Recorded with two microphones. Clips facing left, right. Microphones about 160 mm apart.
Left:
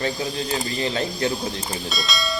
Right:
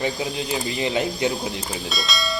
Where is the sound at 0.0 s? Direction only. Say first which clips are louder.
Even; 15° right (ahead or behind).